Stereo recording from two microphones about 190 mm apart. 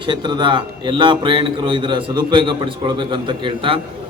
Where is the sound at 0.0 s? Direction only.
25° right (ahead or behind).